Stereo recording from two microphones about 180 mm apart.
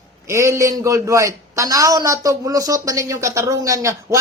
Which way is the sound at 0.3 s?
15° right (ahead or behind).